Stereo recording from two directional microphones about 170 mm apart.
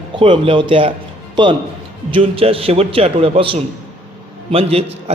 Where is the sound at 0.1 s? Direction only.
30° right (ahead or behind).